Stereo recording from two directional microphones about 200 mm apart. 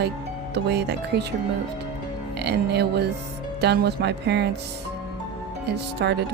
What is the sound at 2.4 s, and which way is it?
Speech, 55° right (ahead or behind).